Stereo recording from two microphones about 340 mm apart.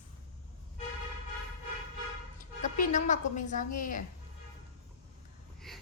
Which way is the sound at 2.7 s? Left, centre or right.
Left.